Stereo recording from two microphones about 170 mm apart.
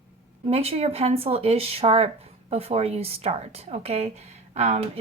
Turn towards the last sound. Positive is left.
turn(degrees=-40)  # may be behind; listen again after turning